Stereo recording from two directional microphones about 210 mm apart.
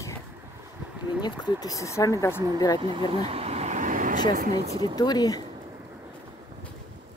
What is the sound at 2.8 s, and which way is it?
Speech, 25° right (ahead or behind).